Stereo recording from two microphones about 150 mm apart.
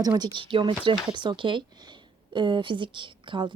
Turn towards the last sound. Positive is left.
turn(degrees=-30)  # may be behind; listen again after turning